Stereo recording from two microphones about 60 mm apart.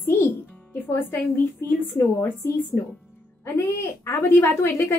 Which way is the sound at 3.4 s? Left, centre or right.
Left.